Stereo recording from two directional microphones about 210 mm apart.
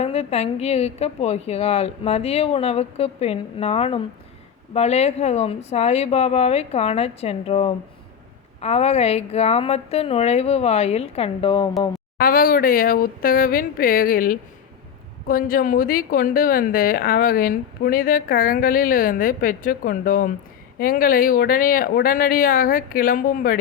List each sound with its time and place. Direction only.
0.0 s a woman's voice: 30° left (ahead or behind)
12.1 s a woman's voice: 45° left (ahead or behind)